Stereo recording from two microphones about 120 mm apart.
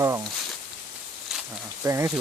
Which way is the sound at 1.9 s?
25° right (ahead or behind).